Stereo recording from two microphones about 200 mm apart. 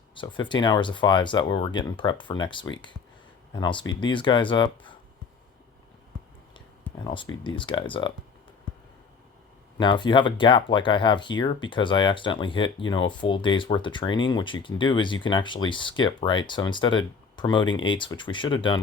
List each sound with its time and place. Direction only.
0.1 s speech: 25° left (ahead or behind)
7.0 s speech: 25° left (ahead or behind)
9.7 s speech: 25° left (ahead or behind)